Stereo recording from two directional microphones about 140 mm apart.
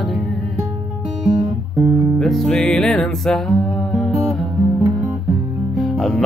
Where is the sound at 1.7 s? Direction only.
20° right (ahead or behind).